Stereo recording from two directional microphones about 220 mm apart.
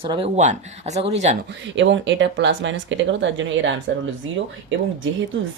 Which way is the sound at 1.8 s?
55° right (ahead or behind).